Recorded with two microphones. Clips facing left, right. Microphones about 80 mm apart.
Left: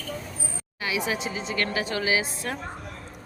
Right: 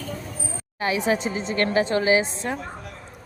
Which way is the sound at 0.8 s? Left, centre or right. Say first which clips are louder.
Right 5 dB; right.